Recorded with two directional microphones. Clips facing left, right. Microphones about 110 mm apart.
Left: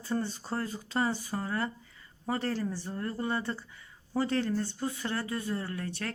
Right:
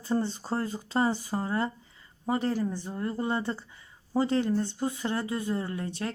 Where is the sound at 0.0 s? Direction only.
25° right (ahead or behind).